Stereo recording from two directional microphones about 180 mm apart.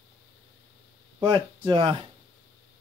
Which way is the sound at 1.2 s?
25° right (ahead or behind).